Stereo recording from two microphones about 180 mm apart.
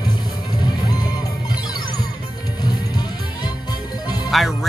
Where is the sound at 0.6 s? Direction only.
20° left (ahead or behind).